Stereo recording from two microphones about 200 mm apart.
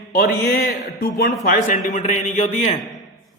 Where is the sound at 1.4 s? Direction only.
40° left (ahead or behind).